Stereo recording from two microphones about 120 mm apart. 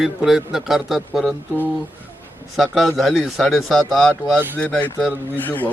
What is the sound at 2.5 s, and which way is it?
A man's voice, centre (ahead or behind).